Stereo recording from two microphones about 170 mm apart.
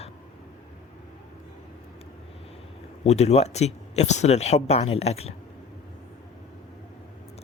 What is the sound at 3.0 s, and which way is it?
A man's voice, 40° left (ahead or behind).